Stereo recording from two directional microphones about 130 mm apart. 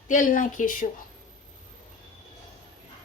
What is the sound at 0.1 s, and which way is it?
Speech, 85° left.